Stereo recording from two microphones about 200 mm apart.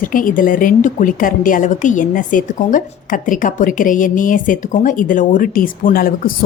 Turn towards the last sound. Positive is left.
turn(degrees=45)  # may be behind; listen again after turning